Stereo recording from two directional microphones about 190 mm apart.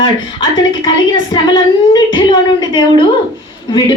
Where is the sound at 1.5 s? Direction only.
25° left (ahead or behind).